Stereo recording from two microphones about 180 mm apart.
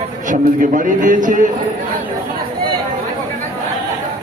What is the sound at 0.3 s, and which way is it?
A man's voice, 45° right (ahead or behind).